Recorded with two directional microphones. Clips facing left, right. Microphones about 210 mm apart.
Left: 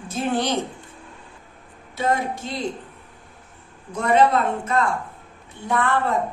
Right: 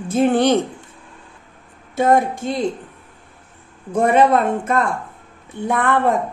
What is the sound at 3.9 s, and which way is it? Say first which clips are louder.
Speech: right 4 dB; 50° right (ahead or behind).